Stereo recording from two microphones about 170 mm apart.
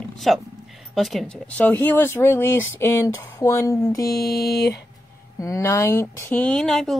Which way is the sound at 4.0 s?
65° left (ahead or behind).